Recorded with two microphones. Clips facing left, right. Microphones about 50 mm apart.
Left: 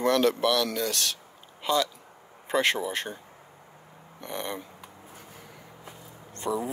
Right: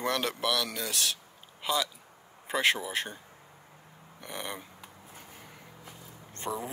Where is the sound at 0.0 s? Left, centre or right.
Centre.